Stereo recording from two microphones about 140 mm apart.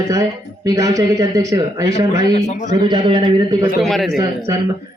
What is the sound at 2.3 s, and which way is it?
Speech, 55° left (ahead or behind).